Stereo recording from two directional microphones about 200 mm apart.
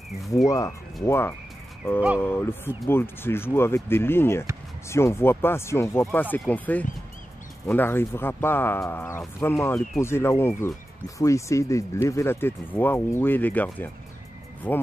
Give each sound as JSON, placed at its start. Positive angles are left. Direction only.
{"t": 0.5, "sound": "speech", "side_deg": 15}